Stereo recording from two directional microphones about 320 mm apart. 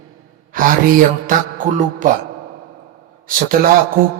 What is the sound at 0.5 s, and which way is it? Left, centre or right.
Speech, right.